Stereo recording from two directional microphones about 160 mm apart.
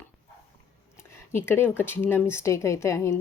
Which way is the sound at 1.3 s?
15° left (ahead or behind).